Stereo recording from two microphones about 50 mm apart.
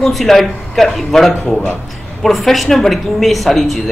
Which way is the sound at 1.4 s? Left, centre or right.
Left.